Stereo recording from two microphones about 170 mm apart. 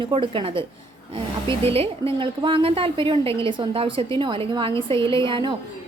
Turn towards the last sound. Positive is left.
turn(degrees=-30)  # may be behind; listen again after turning